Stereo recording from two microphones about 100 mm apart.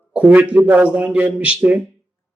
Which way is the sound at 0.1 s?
15° right (ahead or behind).